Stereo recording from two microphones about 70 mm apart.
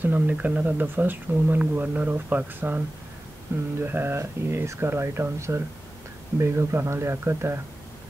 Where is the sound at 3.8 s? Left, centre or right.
Right.